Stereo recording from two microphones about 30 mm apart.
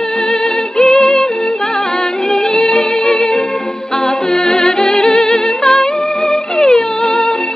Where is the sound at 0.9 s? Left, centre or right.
Left.